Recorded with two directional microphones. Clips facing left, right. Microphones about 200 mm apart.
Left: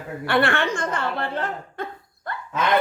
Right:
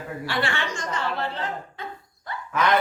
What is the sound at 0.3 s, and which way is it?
A woman's voice, 55° left (ahead or behind).